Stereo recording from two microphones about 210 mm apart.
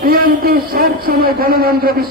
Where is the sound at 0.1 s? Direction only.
45° right (ahead or behind).